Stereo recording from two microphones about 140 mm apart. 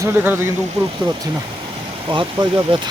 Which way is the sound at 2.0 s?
35° right (ahead or behind).